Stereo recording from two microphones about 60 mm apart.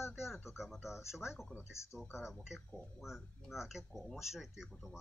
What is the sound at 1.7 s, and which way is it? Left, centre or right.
Speech, left.